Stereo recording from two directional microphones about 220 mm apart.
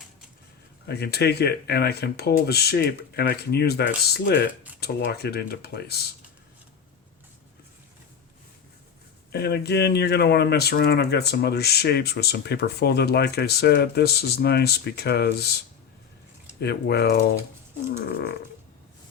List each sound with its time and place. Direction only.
0.9 s speech: 45° left (ahead or behind)
9.3 s speech: 50° left (ahead or behind)